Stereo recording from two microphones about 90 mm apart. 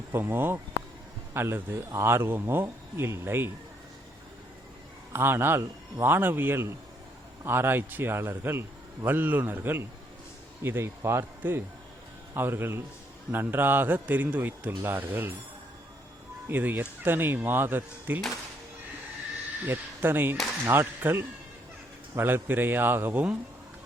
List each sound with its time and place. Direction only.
0.1 s a man's voice: 25° right (ahead or behind)
5.1 s a man's voice: 25° right (ahead or behind)
16.5 s a man's voice: 20° right (ahead or behind)
19.6 s a man's voice: 20° right (ahead or behind)